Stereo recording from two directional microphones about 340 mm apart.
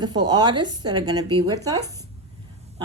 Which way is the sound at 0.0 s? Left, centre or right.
Centre.